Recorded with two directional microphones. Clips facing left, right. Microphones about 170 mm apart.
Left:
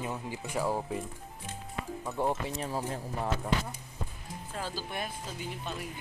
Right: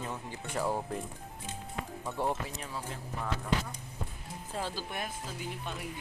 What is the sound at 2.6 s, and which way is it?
Speech, 35° left (ahead or behind).